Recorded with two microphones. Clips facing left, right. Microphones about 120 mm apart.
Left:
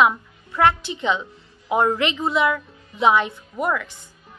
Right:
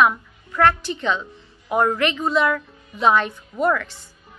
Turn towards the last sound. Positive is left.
turn(degrees=15)  # may be behind; listen again after turning